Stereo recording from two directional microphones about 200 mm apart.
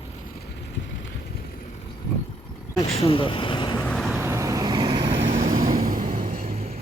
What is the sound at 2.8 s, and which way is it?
Vehicle, 30° left (ahead or behind).